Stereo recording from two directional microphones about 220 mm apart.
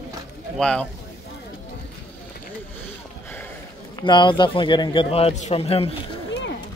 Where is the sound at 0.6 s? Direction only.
5° left (ahead or behind).